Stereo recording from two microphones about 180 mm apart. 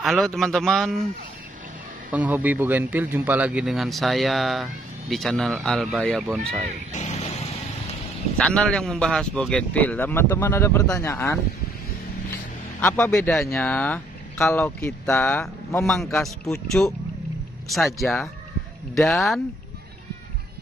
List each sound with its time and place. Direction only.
0.0 s speech: centre (ahead or behind)
2.0 s speech: 10° right (ahead or behind)
6.9 s vehicle: 40° left (ahead or behind)
8.4 s a man's voice: 5° left (ahead or behind)
12.8 s speech: 10° left (ahead or behind)